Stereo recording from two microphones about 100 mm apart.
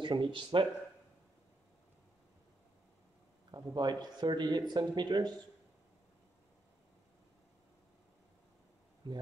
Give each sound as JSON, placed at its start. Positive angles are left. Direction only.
{"t": 0.0, "sound": "speech", "side_deg": -55}
{"t": 3.5, "sound": "speech", "side_deg": -45}